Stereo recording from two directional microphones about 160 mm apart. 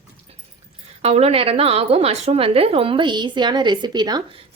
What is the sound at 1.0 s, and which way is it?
A woman's voice, 40° right (ahead or behind).